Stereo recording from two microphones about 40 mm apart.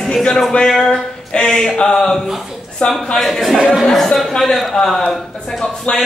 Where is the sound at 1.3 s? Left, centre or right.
Left.